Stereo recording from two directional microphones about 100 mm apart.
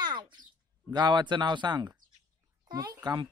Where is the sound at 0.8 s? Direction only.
45° right (ahead or behind).